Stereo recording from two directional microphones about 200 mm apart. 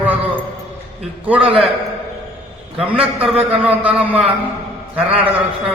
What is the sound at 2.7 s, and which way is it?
A man's voice, 5° right (ahead or behind).